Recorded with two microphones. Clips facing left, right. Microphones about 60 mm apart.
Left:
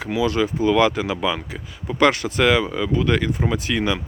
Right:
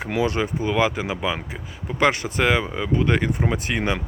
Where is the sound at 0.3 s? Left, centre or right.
Right.